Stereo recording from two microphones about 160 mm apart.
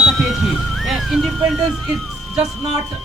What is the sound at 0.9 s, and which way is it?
Music, centre (ahead or behind).